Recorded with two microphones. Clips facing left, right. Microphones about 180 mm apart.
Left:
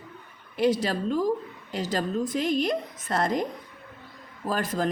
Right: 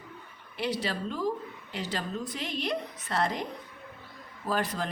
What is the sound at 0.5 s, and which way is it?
Speech, 45° left (ahead or behind).